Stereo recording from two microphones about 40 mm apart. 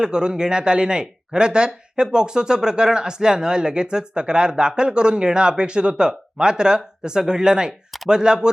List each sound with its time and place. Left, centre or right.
0.0 s speech: centre